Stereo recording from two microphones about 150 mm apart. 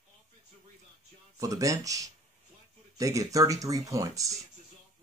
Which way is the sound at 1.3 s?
20° right (ahead or behind).